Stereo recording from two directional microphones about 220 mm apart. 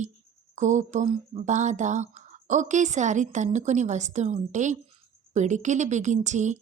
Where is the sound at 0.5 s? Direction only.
35° right (ahead or behind).